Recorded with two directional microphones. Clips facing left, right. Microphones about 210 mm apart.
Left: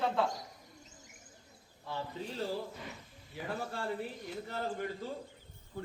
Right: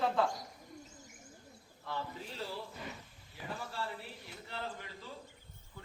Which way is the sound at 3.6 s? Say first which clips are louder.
Left 6 dB; 50° left (ahead or behind).